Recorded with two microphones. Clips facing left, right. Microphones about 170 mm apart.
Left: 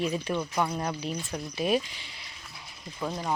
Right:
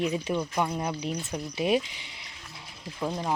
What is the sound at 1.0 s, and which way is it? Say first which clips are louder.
Speech: right 1 dB; 20° right (ahead or behind).